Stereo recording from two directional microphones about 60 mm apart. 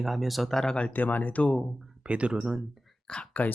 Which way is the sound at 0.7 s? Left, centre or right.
Left.